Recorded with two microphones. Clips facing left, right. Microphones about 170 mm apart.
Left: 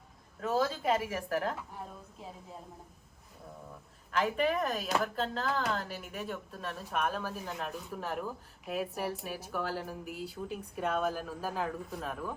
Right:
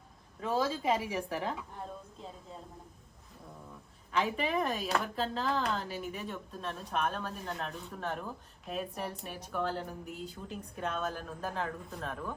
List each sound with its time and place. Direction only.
0.4 s speech: centre (ahead or behind)
4.1 s speech: centre (ahead or behind)